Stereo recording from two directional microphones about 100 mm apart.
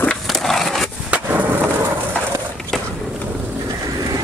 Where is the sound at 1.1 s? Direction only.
15° right (ahead or behind).